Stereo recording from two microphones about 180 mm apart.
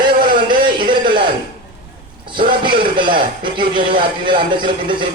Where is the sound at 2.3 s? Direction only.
25° right (ahead or behind).